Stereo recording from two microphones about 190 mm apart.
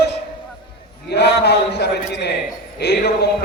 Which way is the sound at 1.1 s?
60° left (ahead or behind).